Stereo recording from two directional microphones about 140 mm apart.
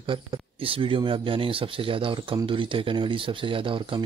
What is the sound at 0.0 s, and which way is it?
Speech, 40° right (ahead or behind).